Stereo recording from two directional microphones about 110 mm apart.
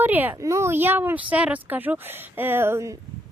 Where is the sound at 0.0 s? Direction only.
15° right (ahead or behind).